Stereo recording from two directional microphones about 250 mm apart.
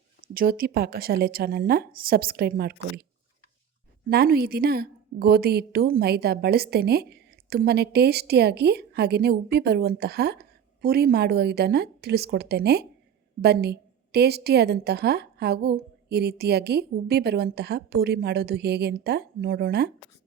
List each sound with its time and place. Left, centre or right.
0.2 s a woman's voice: right
4.1 s a woman's voice: right